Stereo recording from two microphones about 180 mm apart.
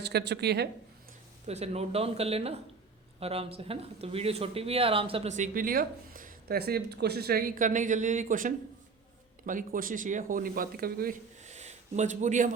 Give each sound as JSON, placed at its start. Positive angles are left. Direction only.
{"t": 0.0, "sound": "speech", "side_deg": -65}
{"t": 1.5, "sound": "speech", "side_deg": -35}
{"t": 11.4, "sound": "a sound", "side_deg": -40}